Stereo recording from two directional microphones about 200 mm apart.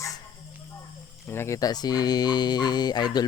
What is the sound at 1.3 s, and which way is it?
Speech, 15° left (ahead or behind).